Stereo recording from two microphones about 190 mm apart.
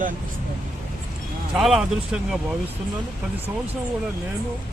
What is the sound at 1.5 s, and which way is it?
Speech, centre (ahead or behind).